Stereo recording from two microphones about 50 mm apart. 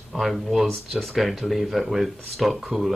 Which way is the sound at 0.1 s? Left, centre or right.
Centre.